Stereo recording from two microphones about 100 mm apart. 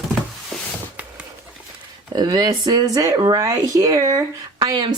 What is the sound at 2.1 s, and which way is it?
Speech, 45° right (ahead or behind).